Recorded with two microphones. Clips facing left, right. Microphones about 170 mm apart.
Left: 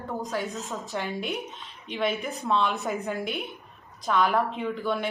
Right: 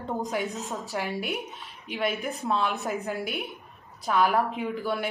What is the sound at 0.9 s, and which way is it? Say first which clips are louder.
Speech: even; centre (ahead or behind).